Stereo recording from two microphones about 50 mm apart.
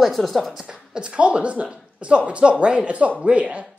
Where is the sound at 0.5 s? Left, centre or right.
Centre.